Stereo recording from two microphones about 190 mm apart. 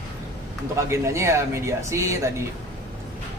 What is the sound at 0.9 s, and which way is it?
Speech, 15° right (ahead or behind).